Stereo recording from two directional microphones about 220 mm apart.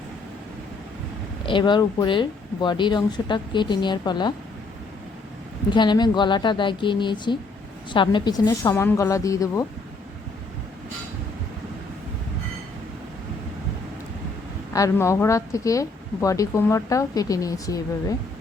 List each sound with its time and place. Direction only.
1.5 s speech: 20° left (ahead or behind)
5.7 s a woman's voice: 20° left (ahead or behind)
14.7 s a woman's voice: 15° left (ahead or behind)